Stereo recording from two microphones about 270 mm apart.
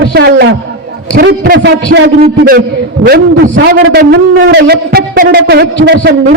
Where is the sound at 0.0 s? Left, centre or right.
Right.